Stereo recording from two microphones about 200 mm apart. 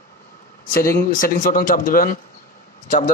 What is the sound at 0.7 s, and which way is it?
A man's voice, 45° left (ahead or behind).